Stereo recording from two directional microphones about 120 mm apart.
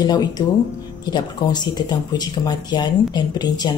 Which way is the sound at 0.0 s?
35° left (ahead or behind).